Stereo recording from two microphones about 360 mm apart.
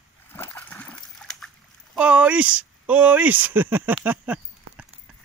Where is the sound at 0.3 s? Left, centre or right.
Centre.